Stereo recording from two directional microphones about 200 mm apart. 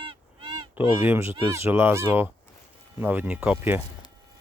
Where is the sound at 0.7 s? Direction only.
10° right (ahead or behind).